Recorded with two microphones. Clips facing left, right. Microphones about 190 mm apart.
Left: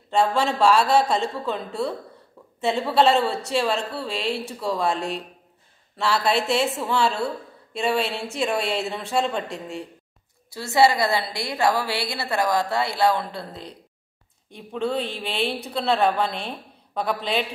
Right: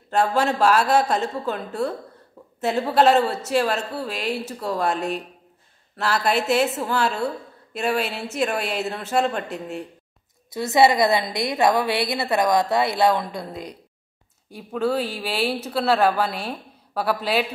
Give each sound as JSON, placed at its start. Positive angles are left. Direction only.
{"t": 0.3, "sound": "a woman's voice", "side_deg": -5}
{"t": 5.9, "sound": "a woman's voice", "side_deg": 0}
{"t": 7.7, "sound": "a woman's voice", "side_deg": 0}
{"t": 10.5, "sound": "a woman's voice", "side_deg": -20}